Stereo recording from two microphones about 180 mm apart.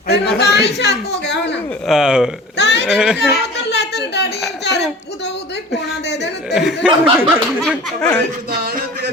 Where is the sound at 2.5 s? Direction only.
70° left (ahead or behind).